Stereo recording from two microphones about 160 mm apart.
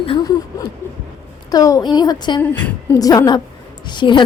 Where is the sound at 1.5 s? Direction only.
20° left (ahead or behind).